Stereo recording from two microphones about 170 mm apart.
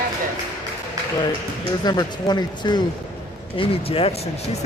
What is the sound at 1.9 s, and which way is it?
Speech, 25° left (ahead or behind).